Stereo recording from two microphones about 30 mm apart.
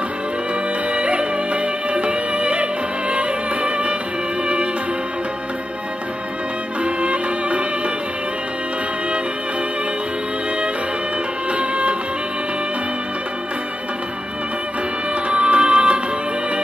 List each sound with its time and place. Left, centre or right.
0.9 s music: right
6.8 s music: right
11.5 s music: right
15.2 s music: right